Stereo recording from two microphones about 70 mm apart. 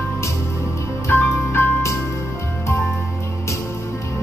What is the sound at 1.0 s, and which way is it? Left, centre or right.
Music, left.